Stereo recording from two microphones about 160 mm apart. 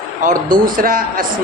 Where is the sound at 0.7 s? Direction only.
60° right (ahead or behind).